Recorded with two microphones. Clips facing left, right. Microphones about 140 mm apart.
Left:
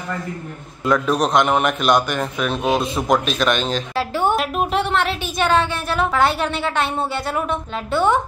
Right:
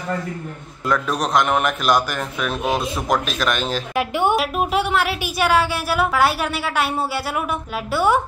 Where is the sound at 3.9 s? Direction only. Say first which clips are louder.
Right 1 dB; 15° right (ahead or behind).